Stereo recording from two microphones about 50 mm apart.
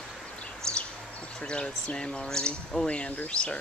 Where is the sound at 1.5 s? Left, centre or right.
Centre.